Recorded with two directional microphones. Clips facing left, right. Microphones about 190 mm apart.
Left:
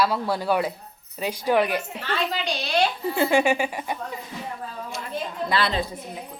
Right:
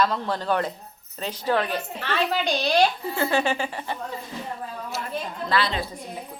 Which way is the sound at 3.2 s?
15° left (ahead or behind).